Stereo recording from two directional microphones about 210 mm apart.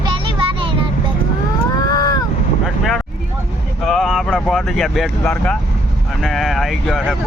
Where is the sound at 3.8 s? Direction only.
Centre (ahead or behind).